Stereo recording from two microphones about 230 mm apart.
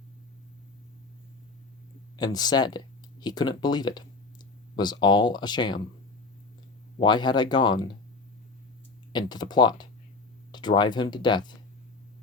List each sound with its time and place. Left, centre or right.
2.1 s speech: centre
7.0 s speech: centre
9.1 s speech: centre